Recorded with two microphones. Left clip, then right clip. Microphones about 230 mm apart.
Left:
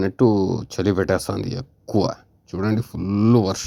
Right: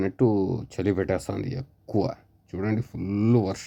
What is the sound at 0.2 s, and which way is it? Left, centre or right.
Speech, centre.